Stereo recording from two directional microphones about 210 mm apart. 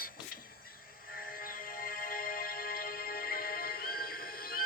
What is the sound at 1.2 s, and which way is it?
Music, 45° left (ahead or behind).